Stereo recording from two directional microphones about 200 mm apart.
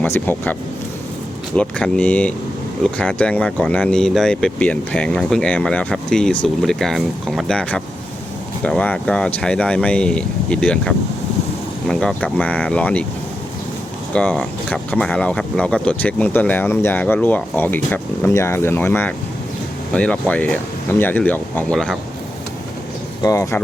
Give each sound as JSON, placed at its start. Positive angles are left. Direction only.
{"t": 0.0, "sound": "speech", "side_deg": 10}
{"t": 1.5, "sound": "speech", "side_deg": 5}
{"t": 14.1, "sound": "speech", "side_deg": 5}
{"t": 23.2, "sound": "speech", "side_deg": 15}